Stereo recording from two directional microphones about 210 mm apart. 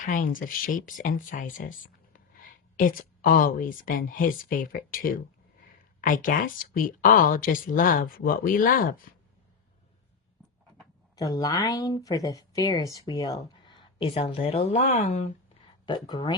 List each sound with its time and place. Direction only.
0.0 s speech: 40° left (ahead or behind)
11.2 s speech: 20° left (ahead or behind)
15.9 s speech: 20° left (ahead or behind)